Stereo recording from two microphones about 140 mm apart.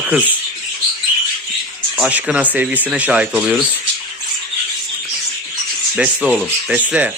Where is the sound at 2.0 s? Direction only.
5° right (ahead or behind).